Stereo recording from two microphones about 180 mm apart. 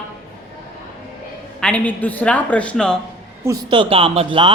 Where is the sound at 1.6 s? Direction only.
5° left (ahead or behind).